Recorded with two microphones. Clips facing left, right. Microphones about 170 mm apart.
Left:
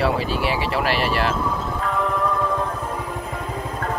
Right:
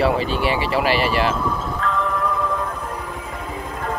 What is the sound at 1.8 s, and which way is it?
Music, 10° left (ahead or behind).